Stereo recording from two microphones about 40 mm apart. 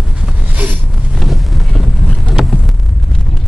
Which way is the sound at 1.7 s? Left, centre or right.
Centre.